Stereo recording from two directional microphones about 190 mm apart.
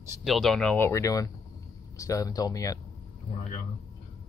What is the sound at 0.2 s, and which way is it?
Speech, centre (ahead or behind).